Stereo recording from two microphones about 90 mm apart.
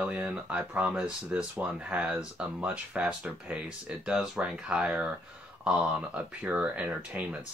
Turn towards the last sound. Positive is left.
turn(degrees=-15)  # may be behind; listen again after turning